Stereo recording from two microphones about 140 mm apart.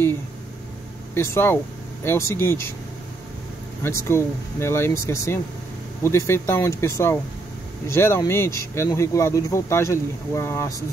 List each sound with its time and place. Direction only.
1.1 s speech: 20° left (ahead or behind)
3.8 s speech: 20° left (ahead or behind)